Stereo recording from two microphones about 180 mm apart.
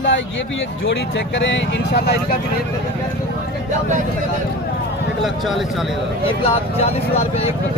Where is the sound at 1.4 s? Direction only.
75° left (ahead or behind).